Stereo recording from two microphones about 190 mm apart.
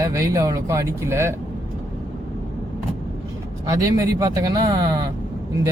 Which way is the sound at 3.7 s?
20° right (ahead or behind).